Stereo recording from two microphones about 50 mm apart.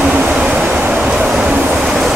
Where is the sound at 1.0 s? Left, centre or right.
Centre.